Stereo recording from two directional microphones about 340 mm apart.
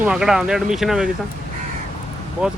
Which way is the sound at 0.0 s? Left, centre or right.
Centre.